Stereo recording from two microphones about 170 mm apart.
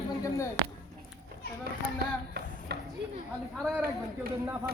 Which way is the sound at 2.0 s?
70° right (ahead or behind).